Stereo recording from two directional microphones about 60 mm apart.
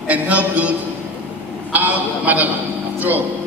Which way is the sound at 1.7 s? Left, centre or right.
Right.